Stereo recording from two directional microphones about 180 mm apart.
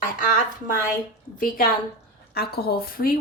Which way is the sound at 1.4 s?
55° left (ahead or behind).